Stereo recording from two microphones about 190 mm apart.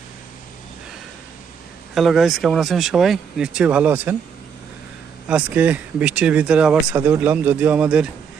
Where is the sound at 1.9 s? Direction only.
Centre (ahead or behind).